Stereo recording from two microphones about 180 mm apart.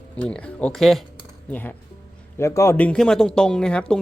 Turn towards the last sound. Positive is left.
turn(degrees=5)  # may be behind; listen again after turning